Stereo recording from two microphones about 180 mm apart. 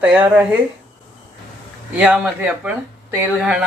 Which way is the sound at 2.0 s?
5° right (ahead or behind).